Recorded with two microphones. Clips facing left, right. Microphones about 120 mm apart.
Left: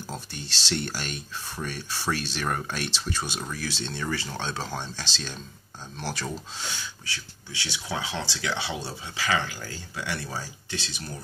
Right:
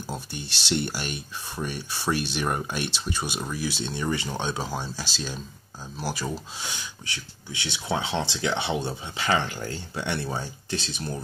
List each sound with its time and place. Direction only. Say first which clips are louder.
0.0 s speech: right 3 dB; 10° right (ahead or behind); by 11.1 s 30° right (ahead or behind)